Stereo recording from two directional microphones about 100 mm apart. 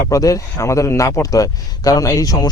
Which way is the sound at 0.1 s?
35° left (ahead or behind).